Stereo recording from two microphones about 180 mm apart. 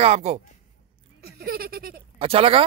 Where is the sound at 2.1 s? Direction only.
30° right (ahead or behind).